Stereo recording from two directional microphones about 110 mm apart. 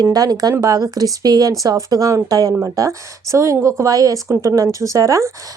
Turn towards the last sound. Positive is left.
turn(degrees=-30)  # may be behind; listen again after turning